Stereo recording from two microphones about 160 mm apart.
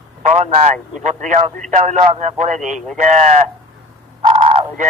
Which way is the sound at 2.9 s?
50° right (ahead or behind).